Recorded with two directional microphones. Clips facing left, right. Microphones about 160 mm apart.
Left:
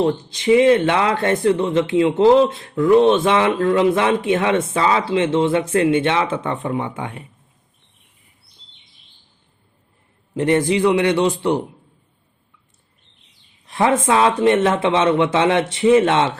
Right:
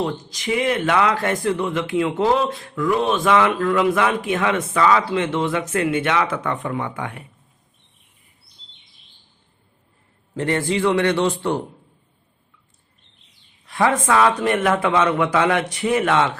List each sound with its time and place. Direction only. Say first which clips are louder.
0.0 s speech: left 6 dB; 25° left (ahead or behind)
10.3 s a man's voice: left 5 dB; 20° left (ahead or behind)
13.7 s speech: left 2 dB; 25° left (ahead or behind)